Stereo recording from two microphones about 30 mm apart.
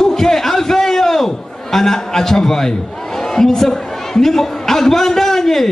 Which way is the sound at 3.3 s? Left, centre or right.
Centre.